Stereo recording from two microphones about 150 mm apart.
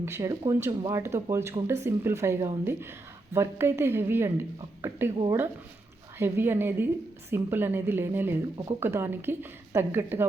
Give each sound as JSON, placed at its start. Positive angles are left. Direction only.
{"t": 0.0, "sound": "a woman's voice", "side_deg": -20}
{"t": 5.1, "sound": "speech", "side_deg": -35}
{"t": 6.1, "sound": "a woman's voice", "side_deg": -15}